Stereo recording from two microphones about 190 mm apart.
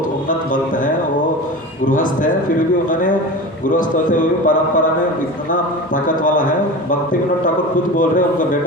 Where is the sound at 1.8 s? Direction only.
45° left (ahead or behind).